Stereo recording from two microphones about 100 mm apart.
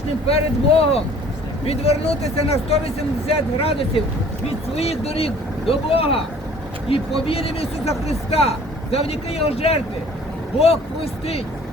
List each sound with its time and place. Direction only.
0.3 s speech: 80° left
4.7 s speech: 90° left